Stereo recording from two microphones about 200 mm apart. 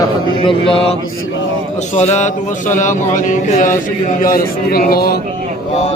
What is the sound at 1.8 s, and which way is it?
Speech, 35° left (ahead or behind).